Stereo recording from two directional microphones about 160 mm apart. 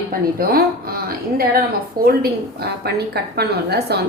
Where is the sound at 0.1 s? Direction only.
65° right (ahead or behind).